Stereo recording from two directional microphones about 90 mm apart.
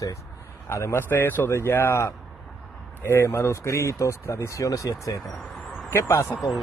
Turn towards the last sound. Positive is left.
turn(degrees=30)  # may be behind; listen again after turning